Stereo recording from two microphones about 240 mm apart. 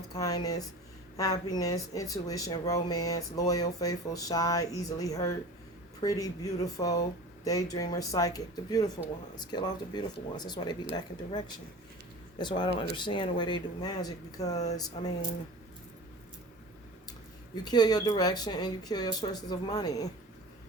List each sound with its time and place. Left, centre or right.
0.1 s speech: centre
14.5 s speech: left
17.5 s speech: centre